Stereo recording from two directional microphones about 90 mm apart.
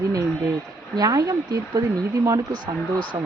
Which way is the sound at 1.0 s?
45° right (ahead or behind).